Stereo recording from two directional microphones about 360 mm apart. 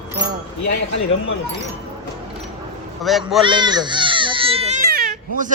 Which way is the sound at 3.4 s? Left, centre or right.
Centre.